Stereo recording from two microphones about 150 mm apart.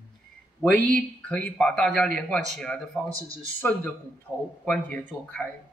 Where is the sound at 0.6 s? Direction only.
10° left (ahead or behind).